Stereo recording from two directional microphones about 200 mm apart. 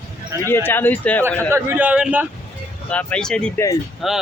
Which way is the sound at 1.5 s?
10° right (ahead or behind).